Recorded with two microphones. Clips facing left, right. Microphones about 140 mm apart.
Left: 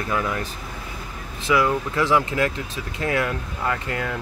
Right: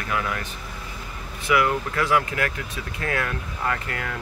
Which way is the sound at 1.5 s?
25° left (ahead or behind).